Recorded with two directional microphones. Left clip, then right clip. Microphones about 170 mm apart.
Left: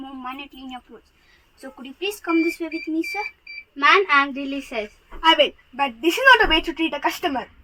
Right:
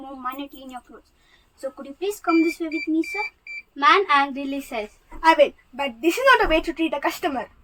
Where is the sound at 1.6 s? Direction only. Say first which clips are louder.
Right 2 dB; 15° right (ahead or behind).